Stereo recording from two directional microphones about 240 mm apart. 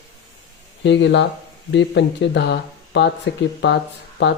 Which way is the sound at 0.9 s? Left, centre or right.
Left.